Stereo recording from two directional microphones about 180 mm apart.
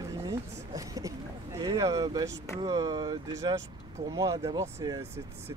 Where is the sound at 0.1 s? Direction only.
15° right (ahead or behind).